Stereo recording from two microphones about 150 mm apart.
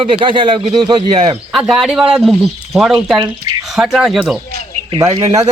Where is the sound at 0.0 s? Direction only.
35° right (ahead or behind).